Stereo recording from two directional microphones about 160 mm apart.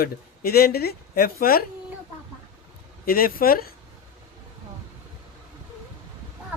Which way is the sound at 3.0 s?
70° left (ahead or behind).